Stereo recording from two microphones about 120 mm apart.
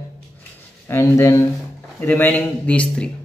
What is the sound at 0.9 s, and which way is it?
Speech, 25° left (ahead or behind).